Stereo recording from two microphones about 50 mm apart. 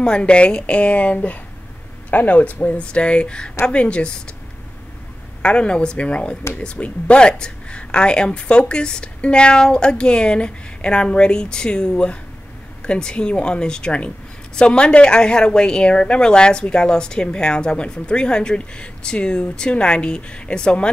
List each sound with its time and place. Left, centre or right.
0.0 s speech: centre
5.4 s speech: left